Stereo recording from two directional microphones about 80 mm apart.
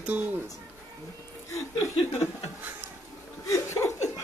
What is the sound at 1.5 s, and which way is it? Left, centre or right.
Speech, left.